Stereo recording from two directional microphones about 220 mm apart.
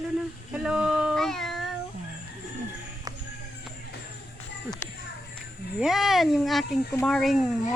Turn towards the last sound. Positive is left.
turn(degrees=0)  # may be behind; listen again after turning